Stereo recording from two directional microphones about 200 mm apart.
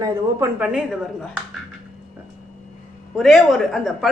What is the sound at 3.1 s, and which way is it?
Speech, centre (ahead or behind).